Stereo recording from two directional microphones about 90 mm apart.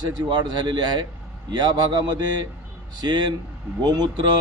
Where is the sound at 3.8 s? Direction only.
50° right (ahead or behind).